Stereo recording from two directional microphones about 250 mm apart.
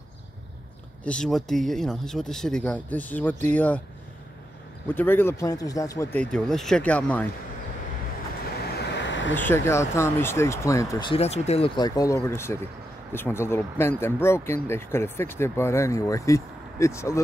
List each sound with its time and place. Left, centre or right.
1.0 s speech: centre
4.8 s speech: centre
6.3 s speech: centre
8.7 s vehicle: left
9.3 s speech: centre